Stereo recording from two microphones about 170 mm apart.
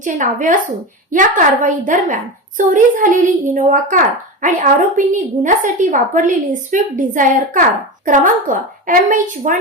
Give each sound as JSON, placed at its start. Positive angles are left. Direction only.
{"t": 0.0, "sound": "a woman's voice", "side_deg": -50}